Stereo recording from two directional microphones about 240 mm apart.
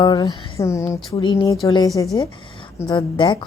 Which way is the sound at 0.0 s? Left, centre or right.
Centre.